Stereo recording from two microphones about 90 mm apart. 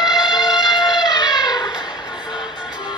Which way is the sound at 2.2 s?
55° left (ahead or behind).